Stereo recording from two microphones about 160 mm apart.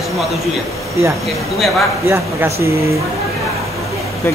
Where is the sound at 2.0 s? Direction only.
15° right (ahead or behind).